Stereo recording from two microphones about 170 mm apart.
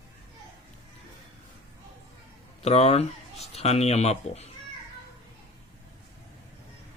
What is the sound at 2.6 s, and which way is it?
Speech, 40° left (ahead or behind).